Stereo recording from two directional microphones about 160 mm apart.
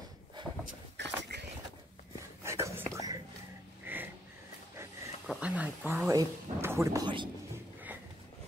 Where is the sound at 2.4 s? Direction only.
20° right (ahead or behind).